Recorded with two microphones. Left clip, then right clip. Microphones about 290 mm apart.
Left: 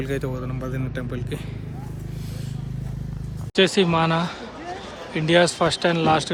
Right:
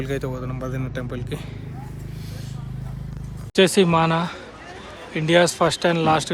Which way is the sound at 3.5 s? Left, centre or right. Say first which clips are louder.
Right 2 dB; centre.